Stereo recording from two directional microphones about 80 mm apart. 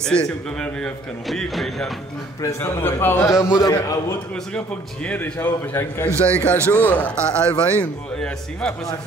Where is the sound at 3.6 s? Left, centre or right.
Left.